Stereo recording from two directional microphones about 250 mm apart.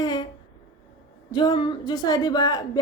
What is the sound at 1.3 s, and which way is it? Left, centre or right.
A woman's voice, centre.